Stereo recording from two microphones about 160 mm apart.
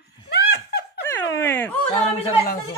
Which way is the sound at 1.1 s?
15° left (ahead or behind).